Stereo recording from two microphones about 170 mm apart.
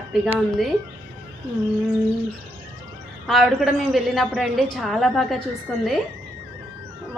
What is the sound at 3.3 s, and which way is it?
A woman's voice, centre (ahead or behind).